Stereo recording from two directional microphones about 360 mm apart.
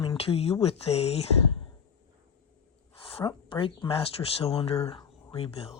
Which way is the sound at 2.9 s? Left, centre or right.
Centre.